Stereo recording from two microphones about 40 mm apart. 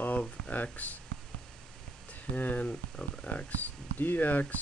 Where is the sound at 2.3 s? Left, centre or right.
Left.